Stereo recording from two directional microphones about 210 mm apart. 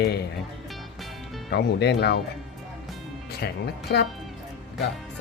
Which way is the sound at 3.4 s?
50° left (ahead or behind).